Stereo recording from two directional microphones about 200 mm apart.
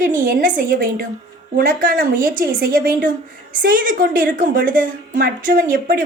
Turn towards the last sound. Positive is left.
turn(degrees=-45)  # may be behind; listen again after turning